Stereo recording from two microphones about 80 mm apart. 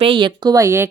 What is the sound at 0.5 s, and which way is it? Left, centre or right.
Speech, right.